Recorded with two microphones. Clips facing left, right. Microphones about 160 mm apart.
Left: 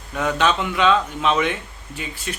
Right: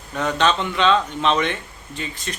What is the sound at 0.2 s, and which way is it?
A man's voice, 10° left (ahead or behind).